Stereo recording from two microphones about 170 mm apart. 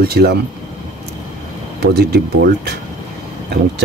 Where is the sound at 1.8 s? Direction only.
70° right (ahead or behind).